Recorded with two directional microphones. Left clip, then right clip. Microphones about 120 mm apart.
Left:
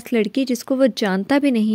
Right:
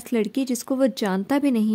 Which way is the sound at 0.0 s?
25° left (ahead or behind).